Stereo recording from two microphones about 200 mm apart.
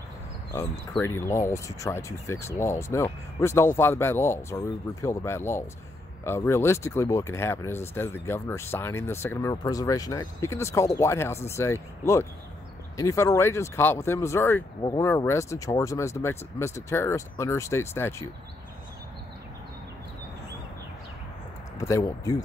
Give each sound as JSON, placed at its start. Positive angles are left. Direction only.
{"t": 0.9, "sound": "speech", "side_deg": 10}
{"t": 21.7, "sound": "speech", "side_deg": 15}